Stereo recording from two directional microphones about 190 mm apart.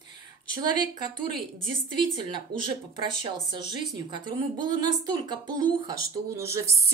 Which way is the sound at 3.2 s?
25° right (ahead or behind).